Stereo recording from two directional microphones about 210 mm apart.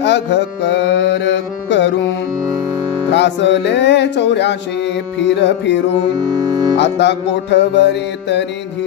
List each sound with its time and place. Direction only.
0.0 s music: 55° left (ahead or behind)
3.1 s music: 55° left (ahead or behind)
6.8 s music: 55° left (ahead or behind)